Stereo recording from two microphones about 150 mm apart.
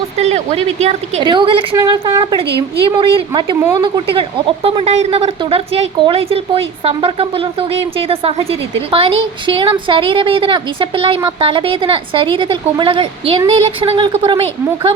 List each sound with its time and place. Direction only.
0.2 s speech: 45° right (ahead or behind)
1.2 s a woman's voice: 30° right (ahead or behind)